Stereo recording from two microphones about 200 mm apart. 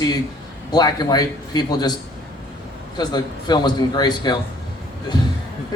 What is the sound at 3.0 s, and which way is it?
A man's voice, 20° left (ahead or behind).